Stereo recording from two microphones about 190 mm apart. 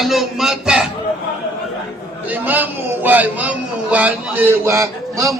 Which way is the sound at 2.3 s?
10° right (ahead or behind).